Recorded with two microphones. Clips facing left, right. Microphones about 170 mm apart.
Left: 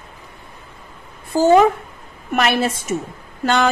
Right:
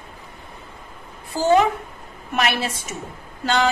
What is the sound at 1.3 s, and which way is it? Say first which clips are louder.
Speech: left 5 dB; 45° left (ahead or behind).